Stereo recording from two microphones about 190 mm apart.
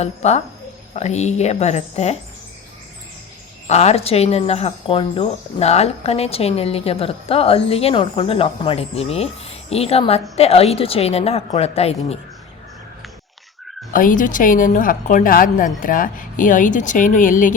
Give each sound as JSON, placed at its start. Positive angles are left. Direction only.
{"t": 0.0, "sound": "speech", "side_deg": 35}
{"t": 3.7, "sound": "speech", "side_deg": 35}
{"t": 13.9, "sound": "a woman's voice", "side_deg": 45}